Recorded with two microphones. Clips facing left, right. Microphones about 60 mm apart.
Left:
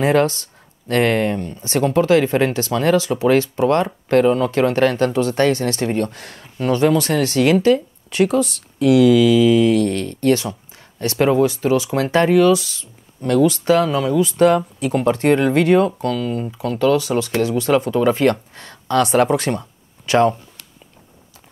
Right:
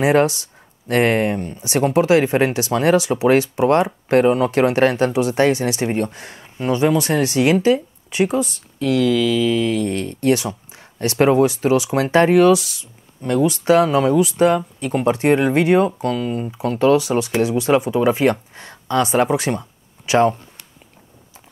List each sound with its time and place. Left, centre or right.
0.0 s speech: centre
3.0 s speech: centre
8.7 s mantra: centre
9.8 s speech: right
13.2 s speech: centre
14.2 s speech: centre
15.0 s speech: centre
16.0 s speech: right
16.6 s speech: right; by 20.3 s centre